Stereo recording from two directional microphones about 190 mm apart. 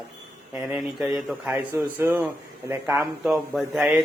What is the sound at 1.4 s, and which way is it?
Speech, 10° right (ahead or behind).